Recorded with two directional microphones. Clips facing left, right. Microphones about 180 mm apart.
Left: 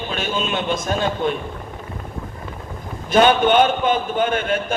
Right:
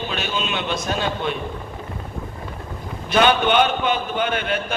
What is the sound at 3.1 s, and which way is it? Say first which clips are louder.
A man's voice: left 3 dB; 45° left (ahead or behind).